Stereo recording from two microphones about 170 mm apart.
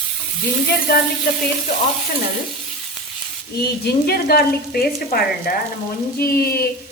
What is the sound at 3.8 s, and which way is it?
Speech, 65° left (ahead or behind).